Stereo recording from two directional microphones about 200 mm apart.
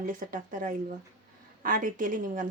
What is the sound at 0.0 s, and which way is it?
A woman's voice, 40° right (ahead or behind).